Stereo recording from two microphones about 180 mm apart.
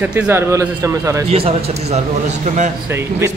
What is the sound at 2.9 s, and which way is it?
Speech, 15° right (ahead or behind).